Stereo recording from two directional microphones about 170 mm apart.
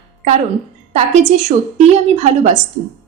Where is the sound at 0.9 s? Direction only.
45° right (ahead or behind).